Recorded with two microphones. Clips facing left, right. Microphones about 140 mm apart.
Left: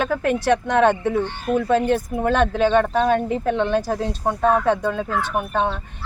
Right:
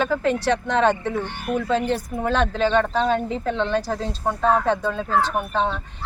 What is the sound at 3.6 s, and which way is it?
Speech, 15° left (ahead or behind).